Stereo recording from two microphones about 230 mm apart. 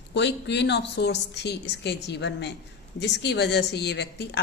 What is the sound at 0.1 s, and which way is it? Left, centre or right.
Speech, left.